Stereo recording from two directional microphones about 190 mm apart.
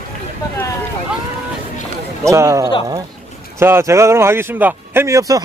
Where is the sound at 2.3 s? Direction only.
15° right (ahead or behind).